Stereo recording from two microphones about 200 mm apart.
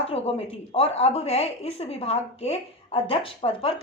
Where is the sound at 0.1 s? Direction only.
30° left (ahead or behind).